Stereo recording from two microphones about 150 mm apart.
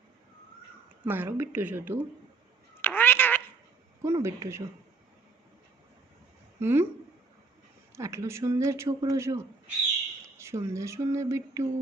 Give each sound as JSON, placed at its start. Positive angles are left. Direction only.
{"t": 1.0, "sound": "a woman's voice", "side_deg": -15}
{"t": 2.8, "sound": "cat", "side_deg": 15}
{"t": 4.0, "sound": "speech", "side_deg": -20}
{"t": 6.6, "sound": "a woman's voice", "side_deg": -15}
{"t": 7.9, "sound": "speech", "side_deg": -20}